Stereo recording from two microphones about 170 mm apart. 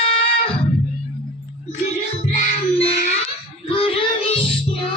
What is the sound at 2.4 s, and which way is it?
Music, 40° left (ahead or behind).